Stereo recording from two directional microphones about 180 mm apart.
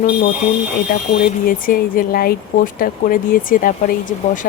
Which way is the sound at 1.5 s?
50° left (ahead or behind).